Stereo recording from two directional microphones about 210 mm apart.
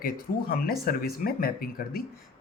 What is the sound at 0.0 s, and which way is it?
Speech, 45° left (ahead or behind).